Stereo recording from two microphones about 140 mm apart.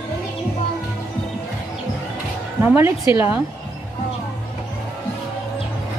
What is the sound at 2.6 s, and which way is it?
Speech, 15° right (ahead or behind).